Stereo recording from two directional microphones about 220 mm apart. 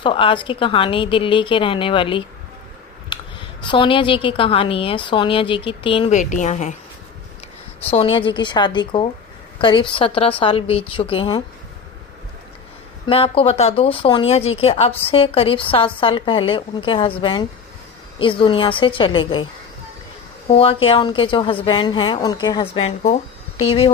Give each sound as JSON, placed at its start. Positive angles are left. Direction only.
{"t": 0.0, "sound": "a woman's voice", "side_deg": 25}
{"t": 3.1, "sound": "a sound", "side_deg": 20}
{"t": 3.6, "sound": "a woman's voice", "side_deg": 20}
{"t": 7.9, "sound": "a woman's voice", "side_deg": 25}
{"t": 13.1, "sound": "a woman's voice", "side_deg": 25}
{"t": 20.5, "sound": "a woman's voice", "side_deg": 25}